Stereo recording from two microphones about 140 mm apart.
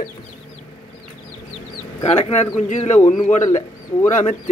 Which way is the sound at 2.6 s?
60° left (ahead or behind).